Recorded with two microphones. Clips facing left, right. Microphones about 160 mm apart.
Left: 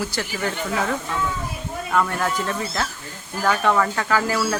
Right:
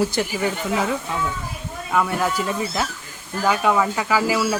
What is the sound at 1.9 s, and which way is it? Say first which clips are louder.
Speech: right 1 dB; 10° right (ahead or behind).